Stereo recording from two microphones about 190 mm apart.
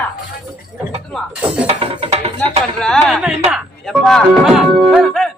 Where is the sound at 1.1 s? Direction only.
5° right (ahead or behind).